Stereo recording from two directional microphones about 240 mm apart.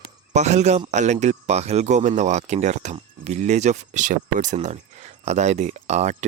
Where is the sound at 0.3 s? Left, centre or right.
Right.